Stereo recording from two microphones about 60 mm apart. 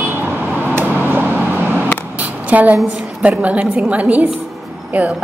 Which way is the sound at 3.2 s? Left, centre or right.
Right.